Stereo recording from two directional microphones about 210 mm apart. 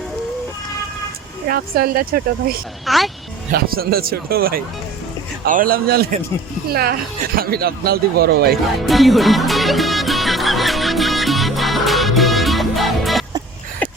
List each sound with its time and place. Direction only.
1.5 s a man's voice: 45° right (ahead or behind)
2.8 s speech: centre (ahead or behind)
3.5 s a man's voice: 45° right (ahead or behind)
7.3 s a man's voice: 45° right (ahead or behind)
8.9 s music: centre (ahead or behind)